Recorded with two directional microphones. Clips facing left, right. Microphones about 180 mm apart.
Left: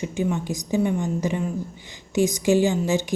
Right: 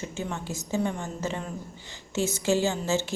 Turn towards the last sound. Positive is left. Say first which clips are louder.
# left 5 dB
turn(degrees=15)  # may be behind; listen again after turning